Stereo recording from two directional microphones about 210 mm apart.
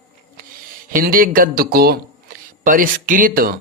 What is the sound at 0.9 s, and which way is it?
Speech, 40° right (ahead or behind).